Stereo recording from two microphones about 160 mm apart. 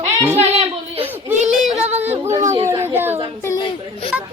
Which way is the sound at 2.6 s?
15° right (ahead or behind).